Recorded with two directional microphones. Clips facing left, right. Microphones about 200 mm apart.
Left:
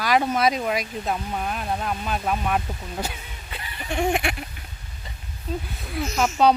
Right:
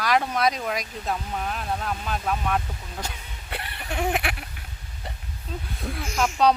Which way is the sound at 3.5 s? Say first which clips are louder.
Right 4 dB; 65° right (ahead or behind).